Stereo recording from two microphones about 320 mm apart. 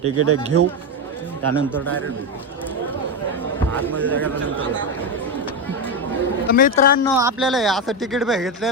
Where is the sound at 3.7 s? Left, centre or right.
Centre.